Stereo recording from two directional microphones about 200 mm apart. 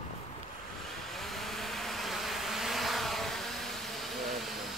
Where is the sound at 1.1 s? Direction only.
Centre (ahead or behind).